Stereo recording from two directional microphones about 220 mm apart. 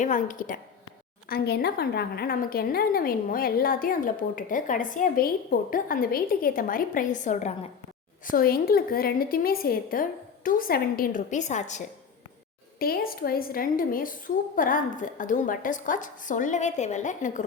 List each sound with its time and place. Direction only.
0.0 s a woman's voice: 35° left (ahead or behind)
12.8 s a woman's voice: 40° left (ahead or behind)